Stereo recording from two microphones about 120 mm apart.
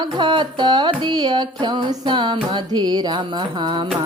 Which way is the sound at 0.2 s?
40° right (ahead or behind).